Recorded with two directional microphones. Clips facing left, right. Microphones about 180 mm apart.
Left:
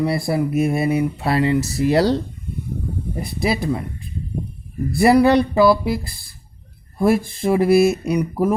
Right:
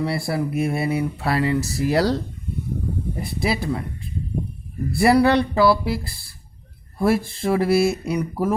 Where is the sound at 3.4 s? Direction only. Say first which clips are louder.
Left 3 dB; 20° left (ahead or behind).